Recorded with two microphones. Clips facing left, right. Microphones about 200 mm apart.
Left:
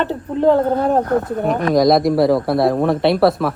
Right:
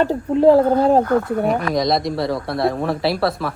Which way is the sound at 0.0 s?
35° right (ahead or behind).